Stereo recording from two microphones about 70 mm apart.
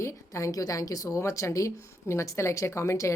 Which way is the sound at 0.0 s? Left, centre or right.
Left.